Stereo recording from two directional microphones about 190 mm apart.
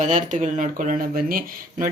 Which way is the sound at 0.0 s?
40° right (ahead or behind).